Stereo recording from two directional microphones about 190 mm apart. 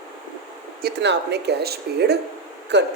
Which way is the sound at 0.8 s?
60° right (ahead or behind).